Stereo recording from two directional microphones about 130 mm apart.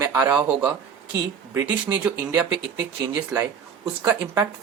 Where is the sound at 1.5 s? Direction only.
25° right (ahead or behind).